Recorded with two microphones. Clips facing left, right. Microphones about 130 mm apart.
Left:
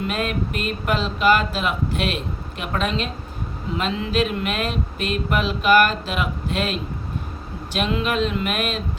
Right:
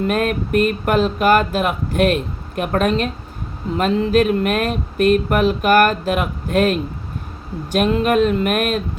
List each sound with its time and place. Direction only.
0.0 s speech: 50° right (ahead or behind)